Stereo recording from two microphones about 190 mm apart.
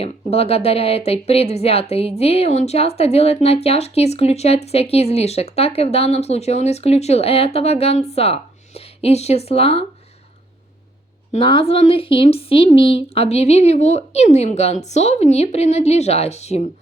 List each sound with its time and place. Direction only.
0.0 s speech: 30° left (ahead or behind)
11.3 s speech: 30° left (ahead or behind)